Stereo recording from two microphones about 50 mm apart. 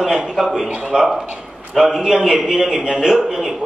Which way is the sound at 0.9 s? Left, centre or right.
Centre.